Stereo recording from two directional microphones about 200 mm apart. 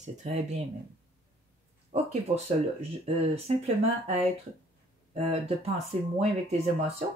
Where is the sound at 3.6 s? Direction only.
30° right (ahead or behind).